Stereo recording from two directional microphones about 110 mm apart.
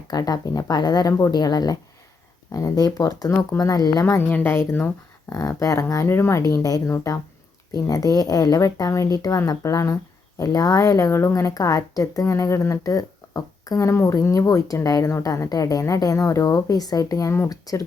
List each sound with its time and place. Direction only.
0.1 s speech: 35° left (ahead or behind)
4.3 s speech: 20° left (ahead or behind)